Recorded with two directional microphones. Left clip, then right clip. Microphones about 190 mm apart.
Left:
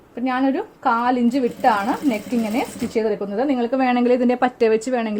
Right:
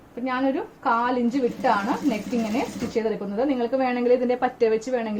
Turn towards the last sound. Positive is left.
turn(degrees=60)  # may be behind; listen again after turning